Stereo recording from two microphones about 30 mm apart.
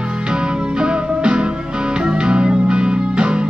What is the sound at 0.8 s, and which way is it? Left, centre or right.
Music, right.